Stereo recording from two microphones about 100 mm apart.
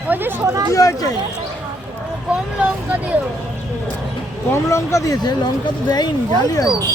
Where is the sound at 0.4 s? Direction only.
35° right (ahead or behind).